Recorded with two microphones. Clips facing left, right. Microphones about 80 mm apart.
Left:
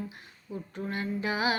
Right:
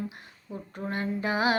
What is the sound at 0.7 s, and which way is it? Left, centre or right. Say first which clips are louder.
Female singing: right 2 dB; right.